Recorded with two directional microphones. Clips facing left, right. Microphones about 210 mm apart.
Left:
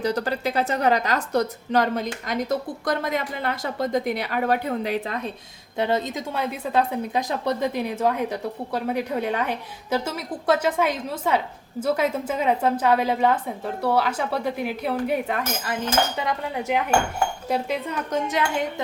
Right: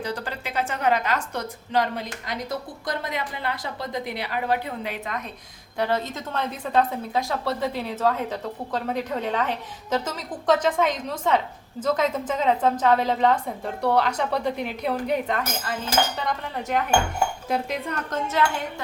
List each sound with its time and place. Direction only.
0.0 s a woman's voice: 40° left (ahead or behind)
5.7 s a woman's voice: 20° left (ahead or behind); by 18.2 s 5° left (ahead or behind)